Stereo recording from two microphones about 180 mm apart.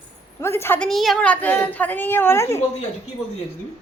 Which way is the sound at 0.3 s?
15° left (ahead or behind).